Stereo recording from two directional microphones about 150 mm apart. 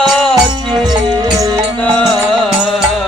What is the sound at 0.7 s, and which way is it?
Music, 30° right (ahead or behind).